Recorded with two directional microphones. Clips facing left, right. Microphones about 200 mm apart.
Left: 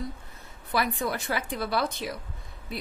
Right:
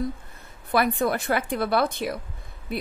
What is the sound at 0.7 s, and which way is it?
A woman's voice, 55° right (ahead or behind).